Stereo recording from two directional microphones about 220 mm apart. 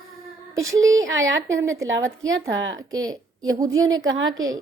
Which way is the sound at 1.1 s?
60° right (ahead or behind).